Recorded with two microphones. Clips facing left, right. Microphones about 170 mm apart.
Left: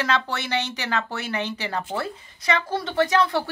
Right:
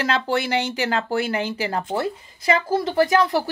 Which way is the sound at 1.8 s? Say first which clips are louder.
Right 5 dB; 25° right (ahead or behind).